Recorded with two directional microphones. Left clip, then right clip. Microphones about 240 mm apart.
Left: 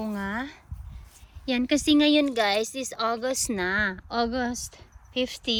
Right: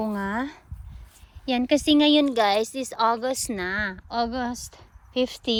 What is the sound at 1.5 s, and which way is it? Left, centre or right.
A woman's voice, centre.